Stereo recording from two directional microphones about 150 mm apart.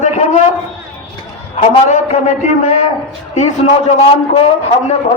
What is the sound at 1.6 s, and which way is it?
A man's voice, 45° left (ahead or behind).